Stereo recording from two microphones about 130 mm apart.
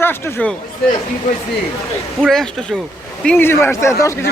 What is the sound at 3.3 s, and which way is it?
Speech, 15° left (ahead or behind).